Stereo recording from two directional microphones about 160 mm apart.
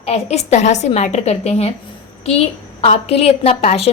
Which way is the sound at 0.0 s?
40° left (ahead or behind).